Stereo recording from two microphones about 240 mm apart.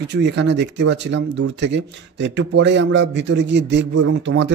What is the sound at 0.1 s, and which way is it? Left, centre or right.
Speech, right.